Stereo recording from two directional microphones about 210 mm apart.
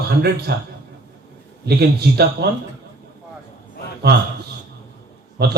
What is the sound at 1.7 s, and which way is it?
Speech, 50° right (ahead or behind).